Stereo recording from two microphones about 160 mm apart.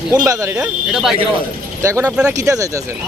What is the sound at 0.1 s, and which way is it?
Speech, 20° right (ahead or behind).